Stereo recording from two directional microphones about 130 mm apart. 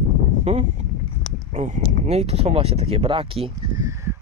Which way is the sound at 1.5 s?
70° right (ahead or behind).